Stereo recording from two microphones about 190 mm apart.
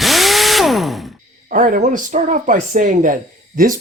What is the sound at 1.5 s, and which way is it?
Speech, 45° right (ahead or behind).